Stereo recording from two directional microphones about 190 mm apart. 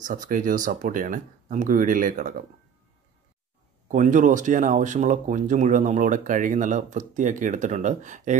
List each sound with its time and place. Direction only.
0.0 s speech: 45° right (ahead or behind)
3.9 s speech: 40° right (ahead or behind)